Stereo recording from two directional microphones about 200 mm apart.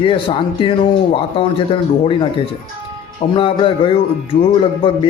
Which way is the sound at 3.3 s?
25° left (ahead or behind).